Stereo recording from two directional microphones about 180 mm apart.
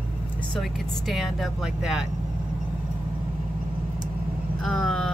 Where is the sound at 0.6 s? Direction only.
Centre (ahead or behind).